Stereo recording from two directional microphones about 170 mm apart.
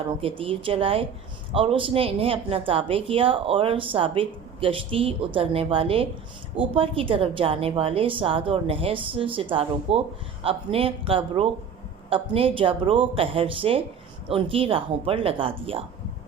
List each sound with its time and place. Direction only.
0.2 s a woman's voice: 35° right (ahead or behind)